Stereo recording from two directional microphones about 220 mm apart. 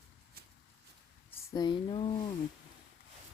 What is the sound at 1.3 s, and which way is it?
Speech, 15° left (ahead or behind).